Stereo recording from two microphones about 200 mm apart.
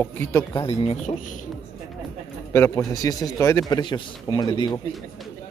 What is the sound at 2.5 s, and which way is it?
A man's voice, 10° left (ahead or behind).